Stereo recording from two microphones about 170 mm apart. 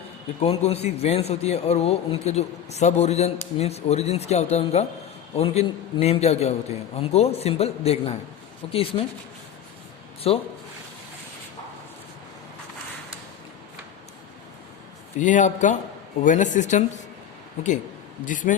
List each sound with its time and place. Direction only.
0.3 s a man's voice: 40° left (ahead or behind)
10.3 s a man's voice: 35° left (ahead or behind)
15.2 s a woman's voice: 45° left (ahead or behind)
18.3 s a woman's voice: 50° left (ahead or behind)